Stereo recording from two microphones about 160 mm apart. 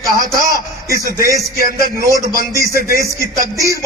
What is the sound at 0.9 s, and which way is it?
A man's voice, 20° right (ahead or behind).